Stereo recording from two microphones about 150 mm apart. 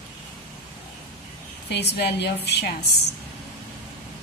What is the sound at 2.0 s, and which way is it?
Speech, 90° left.